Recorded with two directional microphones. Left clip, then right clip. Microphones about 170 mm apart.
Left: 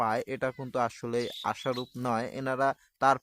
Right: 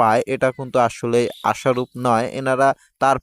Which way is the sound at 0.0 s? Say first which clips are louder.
Right 13 dB; 45° right (ahead or behind).